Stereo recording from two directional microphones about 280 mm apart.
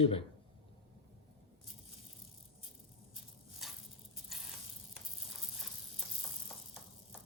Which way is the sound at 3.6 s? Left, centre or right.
Centre.